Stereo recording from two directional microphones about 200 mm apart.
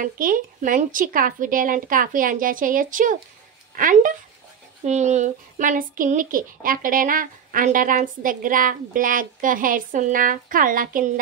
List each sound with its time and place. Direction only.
0.0 s a child's voice: 40° right (ahead or behind)